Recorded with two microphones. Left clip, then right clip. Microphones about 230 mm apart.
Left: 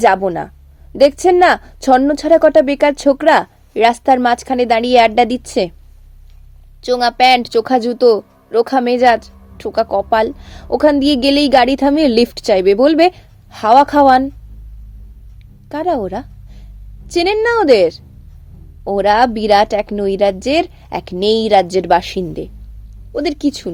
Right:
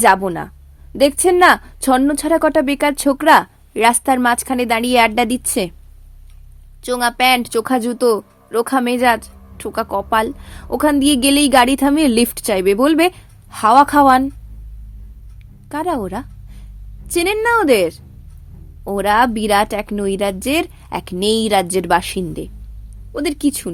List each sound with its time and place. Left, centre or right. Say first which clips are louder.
0.0 s speech: left 1 dB; right
6.8 s speech: left 4 dB; right
15.7 s a woman's voice: left 3 dB; right